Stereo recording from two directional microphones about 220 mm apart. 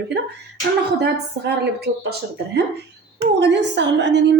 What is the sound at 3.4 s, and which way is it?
Speech, 50° right (ahead or behind).